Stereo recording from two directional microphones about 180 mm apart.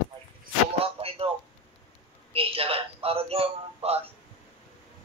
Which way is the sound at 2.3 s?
30° right (ahead or behind).